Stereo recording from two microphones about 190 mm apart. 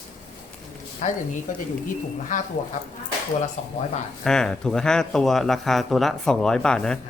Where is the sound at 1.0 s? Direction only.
40° left (ahead or behind).